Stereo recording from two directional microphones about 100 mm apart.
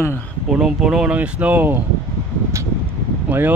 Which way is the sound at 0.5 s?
5° right (ahead or behind).